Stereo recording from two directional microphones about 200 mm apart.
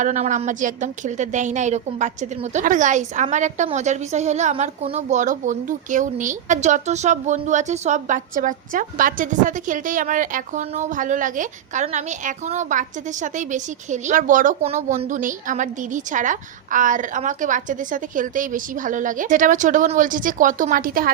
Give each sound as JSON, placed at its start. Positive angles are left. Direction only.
{"t": 0.0, "sound": "a woman's voice", "side_deg": -40}